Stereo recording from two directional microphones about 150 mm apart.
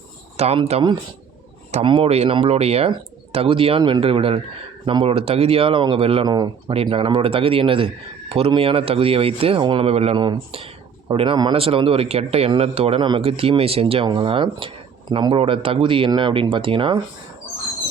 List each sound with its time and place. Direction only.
0.3 s speech: 45° right (ahead or behind)
6.2 s speech: 25° right (ahead or behind)